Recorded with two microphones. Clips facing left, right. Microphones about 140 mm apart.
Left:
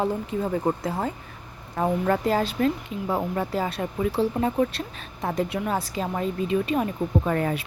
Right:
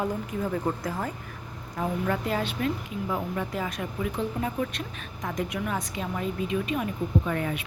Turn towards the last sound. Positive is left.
turn(degrees=40)  # may be behind; listen again after turning